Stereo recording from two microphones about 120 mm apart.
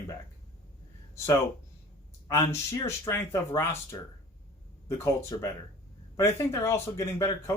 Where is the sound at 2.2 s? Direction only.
25° left (ahead or behind).